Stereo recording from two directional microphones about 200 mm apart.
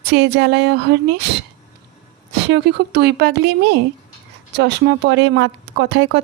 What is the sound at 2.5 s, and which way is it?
A woman's voice, 55° right (ahead or behind).